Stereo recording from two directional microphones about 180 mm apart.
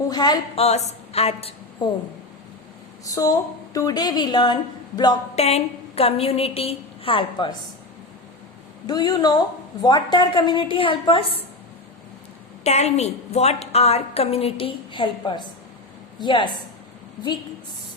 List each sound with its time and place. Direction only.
0.1 s a woman's voice: 25° left (ahead or behind)
0.5 s a woman's voice: 35° left (ahead or behind)
3.0 s a woman's voice: 20° left (ahead or behind)
8.9 s a woman's voice: 20° left (ahead or behind)
12.6 s a woman's voice: 35° left (ahead or behind)